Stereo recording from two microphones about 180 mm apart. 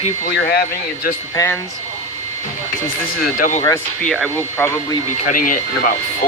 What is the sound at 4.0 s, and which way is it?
Speech, centre (ahead or behind).